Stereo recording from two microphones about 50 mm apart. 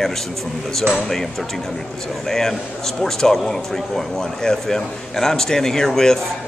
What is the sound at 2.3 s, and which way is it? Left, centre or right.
A man's voice, centre.